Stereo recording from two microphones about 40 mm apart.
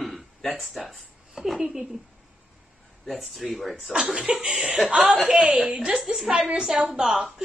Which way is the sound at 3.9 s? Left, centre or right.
Right.